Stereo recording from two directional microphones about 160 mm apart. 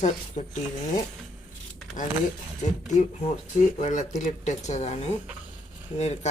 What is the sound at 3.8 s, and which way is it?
Speech, 50° left (ahead or behind).